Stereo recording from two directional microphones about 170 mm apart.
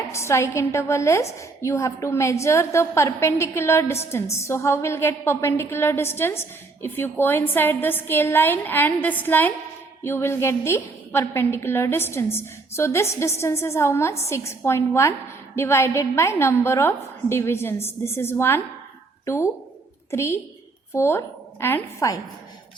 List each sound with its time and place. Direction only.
0.1 s a woman's voice: 15° left (ahead or behind)